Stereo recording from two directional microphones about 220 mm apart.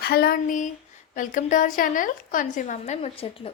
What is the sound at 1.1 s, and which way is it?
A woman's voice, 35° left (ahead or behind).